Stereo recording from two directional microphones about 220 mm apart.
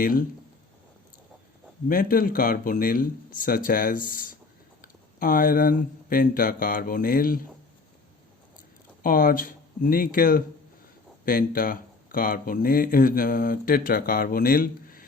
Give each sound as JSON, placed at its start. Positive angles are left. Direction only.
{"t": 0.0, "sound": "speech", "side_deg": 40}
{"t": 1.9, "sound": "speech", "side_deg": 40}
{"t": 9.0, "sound": "speech", "side_deg": 40}